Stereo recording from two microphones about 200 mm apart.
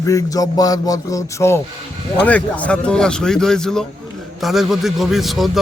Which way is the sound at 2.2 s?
5° left (ahead or behind).